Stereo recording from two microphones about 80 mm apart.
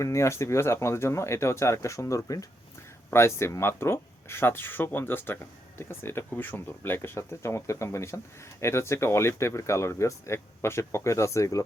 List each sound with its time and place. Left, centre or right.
0.0 s speech: left
3.1 s speech: left